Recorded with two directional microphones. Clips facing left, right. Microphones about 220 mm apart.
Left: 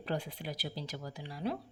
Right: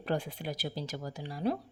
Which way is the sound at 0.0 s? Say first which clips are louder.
Right 4 dB; 50° right (ahead or behind).